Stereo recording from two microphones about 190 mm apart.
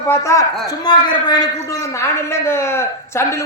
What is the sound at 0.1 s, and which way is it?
A man's voice, 15° left (ahead or behind).